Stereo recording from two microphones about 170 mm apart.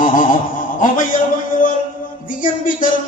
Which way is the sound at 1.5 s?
55° left (ahead or behind).